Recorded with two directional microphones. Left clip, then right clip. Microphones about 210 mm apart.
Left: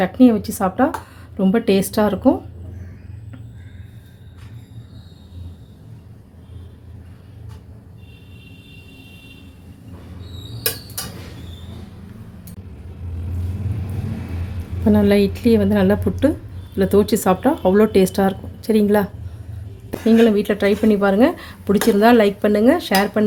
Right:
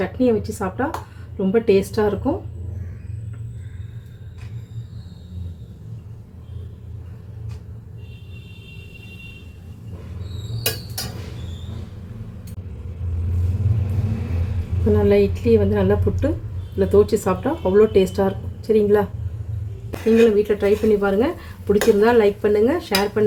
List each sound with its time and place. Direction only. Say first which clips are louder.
0.0 s speech: left 4 dB; 50° left (ahead or behind)
14.9 s speech: even; 45° left (ahead or behind)
20.3 s speech: even; 50° left (ahead or behind)